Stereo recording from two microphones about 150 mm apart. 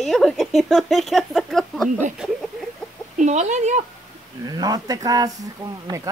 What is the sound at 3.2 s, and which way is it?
Speech, 50° right (ahead or behind).